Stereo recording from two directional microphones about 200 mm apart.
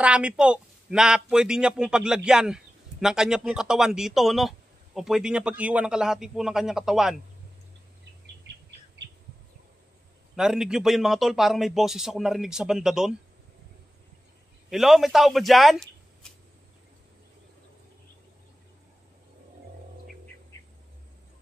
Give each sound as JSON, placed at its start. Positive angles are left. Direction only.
{"t": 0.0, "sound": "a man's voice", "side_deg": -5}
{"t": 8.6, "sound": "bird", "side_deg": -60}
{"t": 10.3, "sound": "a man's voice", "side_deg": -5}
{"t": 14.7, "sound": "speech", "side_deg": 0}